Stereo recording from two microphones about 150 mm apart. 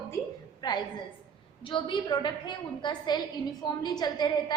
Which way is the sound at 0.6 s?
30° left (ahead or behind).